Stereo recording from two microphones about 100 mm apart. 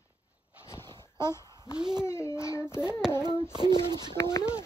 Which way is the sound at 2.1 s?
25° left (ahead or behind).